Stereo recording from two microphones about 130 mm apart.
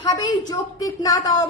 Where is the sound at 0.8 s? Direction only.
30° left (ahead or behind).